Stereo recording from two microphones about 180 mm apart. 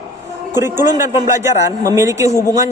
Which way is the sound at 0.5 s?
15° right (ahead or behind).